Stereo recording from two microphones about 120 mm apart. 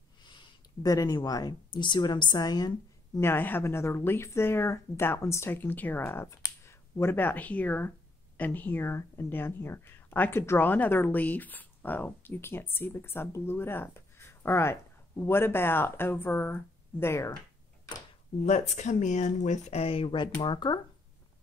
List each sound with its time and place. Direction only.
0.2 s speech: 40° left (ahead or behind)
3.2 s speech: 20° left (ahead or behind)
18.4 s speech: 80° left; by 20.8 s 40° left (ahead or behind)